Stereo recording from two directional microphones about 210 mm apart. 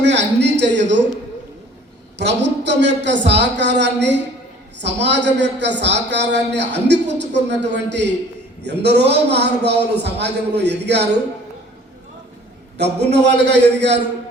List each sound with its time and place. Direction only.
0.0 s a sound: 55° right (ahead or behind)
2.1 s a man's voice: 55° right (ahead or behind)
12.7 s speech: 55° right (ahead or behind)